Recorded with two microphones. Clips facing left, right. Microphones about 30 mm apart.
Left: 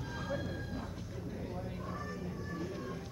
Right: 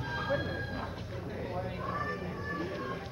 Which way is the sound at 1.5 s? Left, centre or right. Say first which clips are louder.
Right 6 dB; right.